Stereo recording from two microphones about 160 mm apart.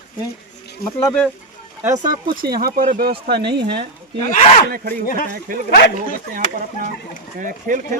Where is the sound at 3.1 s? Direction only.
85° right.